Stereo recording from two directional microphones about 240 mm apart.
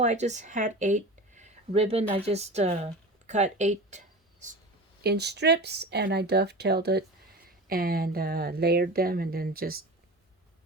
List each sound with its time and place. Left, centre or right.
0.0 s speech: right
5.0 s speech: right